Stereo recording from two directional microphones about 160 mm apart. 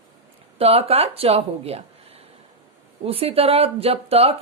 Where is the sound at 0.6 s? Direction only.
40° right (ahead or behind).